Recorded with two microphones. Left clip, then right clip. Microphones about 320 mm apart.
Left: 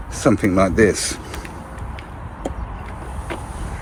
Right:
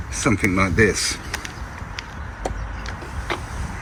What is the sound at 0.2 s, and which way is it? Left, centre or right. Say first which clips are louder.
Speech: left 4 dB; centre.